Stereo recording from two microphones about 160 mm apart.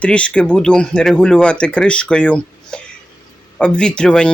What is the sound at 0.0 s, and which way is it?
Speech, 5° left (ahead or behind).